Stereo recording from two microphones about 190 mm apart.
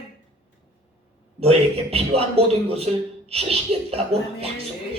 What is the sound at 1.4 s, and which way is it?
A man's voice, 30° right (ahead or behind).